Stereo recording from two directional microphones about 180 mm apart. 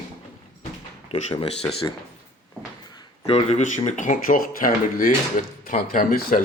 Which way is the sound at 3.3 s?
35° left (ahead or behind).